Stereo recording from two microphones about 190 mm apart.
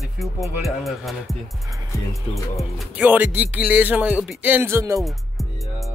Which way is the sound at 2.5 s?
5° right (ahead or behind).